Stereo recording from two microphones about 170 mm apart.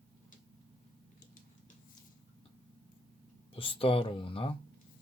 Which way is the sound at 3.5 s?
30° left (ahead or behind).